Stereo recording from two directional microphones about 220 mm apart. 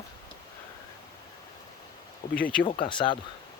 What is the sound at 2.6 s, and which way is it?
Speech, 20° left (ahead or behind).